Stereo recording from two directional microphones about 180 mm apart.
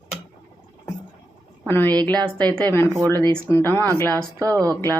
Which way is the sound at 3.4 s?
15° left (ahead or behind).